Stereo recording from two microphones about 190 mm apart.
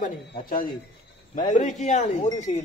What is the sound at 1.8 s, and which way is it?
Speech, 40° left (ahead or behind).